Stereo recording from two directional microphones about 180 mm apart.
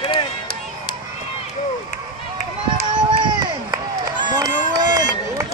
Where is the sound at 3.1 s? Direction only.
25° right (ahead or behind).